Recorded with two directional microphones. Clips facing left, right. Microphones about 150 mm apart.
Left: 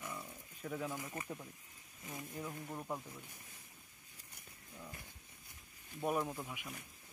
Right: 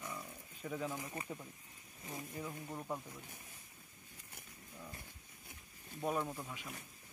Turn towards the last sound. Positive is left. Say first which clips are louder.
# left 1 dB
turn(degrees=5)  # may be behind; listen again after turning